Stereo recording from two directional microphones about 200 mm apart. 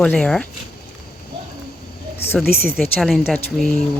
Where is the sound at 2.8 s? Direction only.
Centre (ahead or behind).